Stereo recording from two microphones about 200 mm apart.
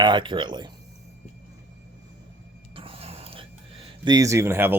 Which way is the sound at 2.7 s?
25° right (ahead or behind).